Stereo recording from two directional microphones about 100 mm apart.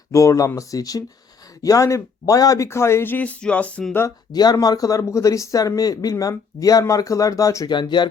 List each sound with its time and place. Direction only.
0.1 s speech: 30° left (ahead or behind); by 3.8 s 15° left (ahead or behind)
4.3 s speech: 40° left (ahead or behind)
7.7 s speech: 50° left (ahead or behind)